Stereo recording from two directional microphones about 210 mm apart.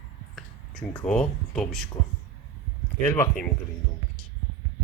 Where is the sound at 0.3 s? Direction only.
5° left (ahead or behind).